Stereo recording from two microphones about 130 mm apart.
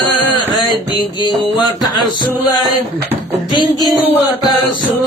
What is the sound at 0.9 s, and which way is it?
Music, 35° left (ahead or behind).